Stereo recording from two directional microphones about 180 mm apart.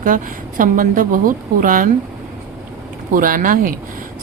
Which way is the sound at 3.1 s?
50° right (ahead or behind).